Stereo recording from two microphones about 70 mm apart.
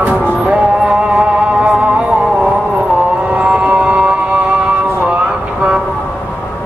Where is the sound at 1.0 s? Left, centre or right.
Centre.